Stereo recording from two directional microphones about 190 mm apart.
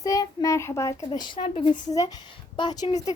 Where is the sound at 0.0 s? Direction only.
20° left (ahead or behind).